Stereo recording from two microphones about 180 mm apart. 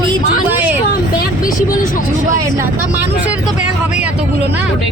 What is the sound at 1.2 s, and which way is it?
Speech, 50° left (ahead or behind).